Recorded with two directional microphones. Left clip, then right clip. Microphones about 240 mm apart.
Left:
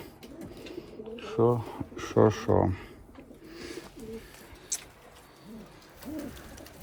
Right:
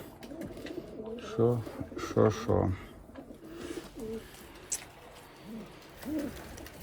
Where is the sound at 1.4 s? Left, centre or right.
Left.